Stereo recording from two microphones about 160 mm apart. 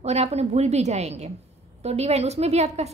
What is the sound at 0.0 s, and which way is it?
A woman's voice, 40° right (ahead or behind).